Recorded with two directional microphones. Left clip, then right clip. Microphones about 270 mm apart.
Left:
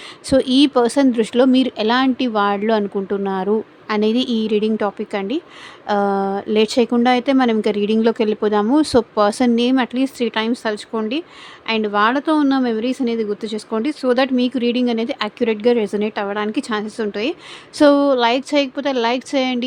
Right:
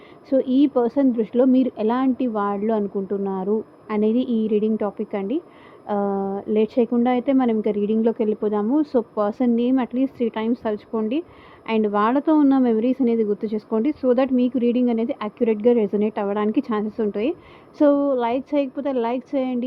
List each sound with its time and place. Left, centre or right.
0.3 s speech: left